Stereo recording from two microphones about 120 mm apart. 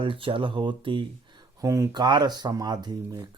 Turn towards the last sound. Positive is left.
turn(degrees=-35)  # may be behind; listen again after turning